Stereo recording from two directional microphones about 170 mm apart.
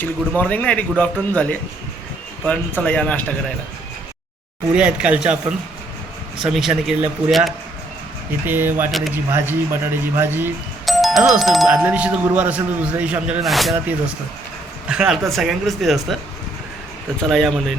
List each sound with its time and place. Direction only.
0.0 s speech: 10° left (ahead or behind)
4.7 s speech: 5° right (ahead or behind)
8.4 s speech: 10° right (ahead or behind)
8.9 s speech: centre (ahead or behind)
9.1 s speech: 10° right (ahead or behind)
10.8 s speech: centre (ahead or behind)
14.8 s speech: 5° right (ahead or behind)
17.2 s speech: centre (ahead or behind)